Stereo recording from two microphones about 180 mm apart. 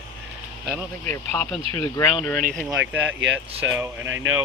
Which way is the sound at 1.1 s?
10° left (ahead or behind).